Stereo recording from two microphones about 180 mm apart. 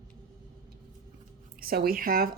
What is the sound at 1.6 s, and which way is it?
Speech, 55° right (ahead or behind).